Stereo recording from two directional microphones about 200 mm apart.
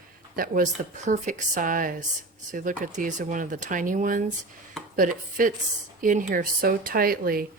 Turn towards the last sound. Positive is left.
turn(degrees=-45)  # may be behind; listen again after turning